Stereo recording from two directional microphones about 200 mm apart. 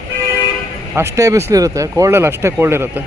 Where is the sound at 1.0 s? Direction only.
15° right (ahead or behind).